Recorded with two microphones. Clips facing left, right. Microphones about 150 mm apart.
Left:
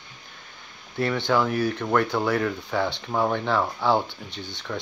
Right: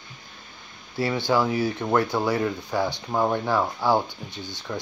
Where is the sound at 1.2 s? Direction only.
10° right (ahead or behind).